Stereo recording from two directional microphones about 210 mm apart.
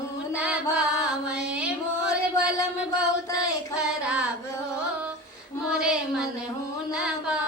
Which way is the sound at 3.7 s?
5° right (ahead or behind).